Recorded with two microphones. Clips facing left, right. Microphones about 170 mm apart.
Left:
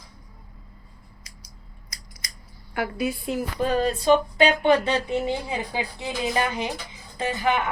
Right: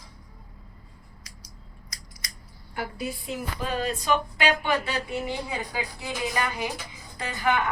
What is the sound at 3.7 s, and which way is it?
A woman's voice, 35° left (ahead or behind).